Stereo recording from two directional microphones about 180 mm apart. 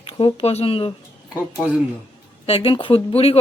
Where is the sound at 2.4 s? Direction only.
30° left (ahead or behind).